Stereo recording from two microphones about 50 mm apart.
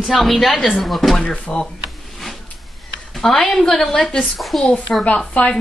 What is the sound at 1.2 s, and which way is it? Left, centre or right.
Speech, left.